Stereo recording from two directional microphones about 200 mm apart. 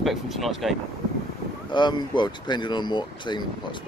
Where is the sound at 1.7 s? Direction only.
20° left (ahead or behind).